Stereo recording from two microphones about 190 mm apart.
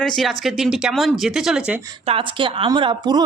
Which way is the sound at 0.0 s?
Centre (ahead or behind).